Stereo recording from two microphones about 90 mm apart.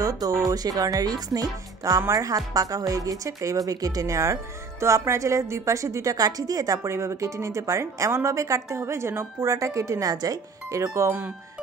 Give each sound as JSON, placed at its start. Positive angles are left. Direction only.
{"t": 0.0, "sound": "speech", "side_deg": -40}